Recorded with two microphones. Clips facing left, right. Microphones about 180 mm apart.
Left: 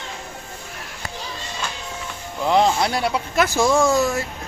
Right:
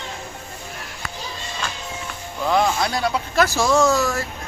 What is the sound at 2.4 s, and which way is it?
Speech, 20° left (ahead or behind).